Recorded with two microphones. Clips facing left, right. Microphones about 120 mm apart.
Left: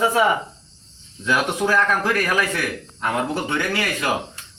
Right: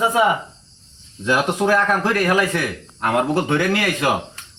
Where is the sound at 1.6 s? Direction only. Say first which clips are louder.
Right 2 dB; 30° right (ahead or behind).